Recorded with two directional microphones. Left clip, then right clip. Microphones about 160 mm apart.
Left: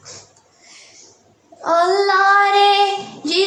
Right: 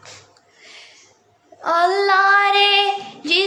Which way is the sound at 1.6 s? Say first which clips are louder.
Left 1 dB; 25° right (ahead or behind).